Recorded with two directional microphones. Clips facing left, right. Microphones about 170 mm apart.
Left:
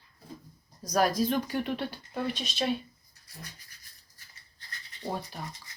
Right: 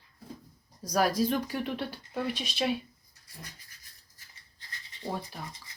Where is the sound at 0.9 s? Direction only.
5° right (ahead or behind).